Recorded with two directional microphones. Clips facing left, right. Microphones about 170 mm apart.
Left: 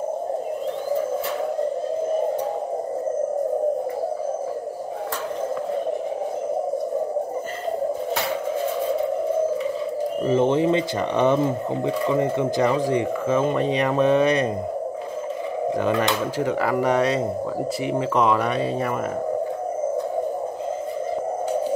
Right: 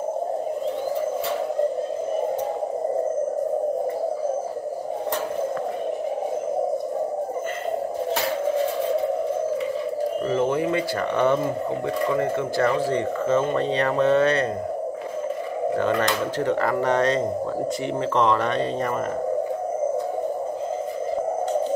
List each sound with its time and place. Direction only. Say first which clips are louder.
10.2 s speech: left 5 dB; 25° left (ahead or behind)
15.8 s speech: left 1 dB; 10° left (ahead or behind)